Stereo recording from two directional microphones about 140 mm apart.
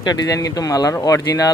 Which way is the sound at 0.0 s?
30° left (ahead or behind).